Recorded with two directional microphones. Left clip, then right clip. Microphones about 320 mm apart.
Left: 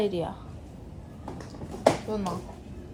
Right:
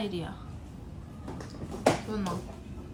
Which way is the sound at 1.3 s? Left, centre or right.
Centre.